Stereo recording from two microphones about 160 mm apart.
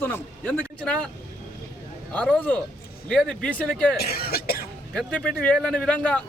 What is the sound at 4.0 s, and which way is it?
Cough, 70° left (ahead or behind).